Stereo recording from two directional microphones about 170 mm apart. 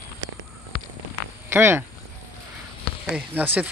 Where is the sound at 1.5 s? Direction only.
15° right (ahead or behind).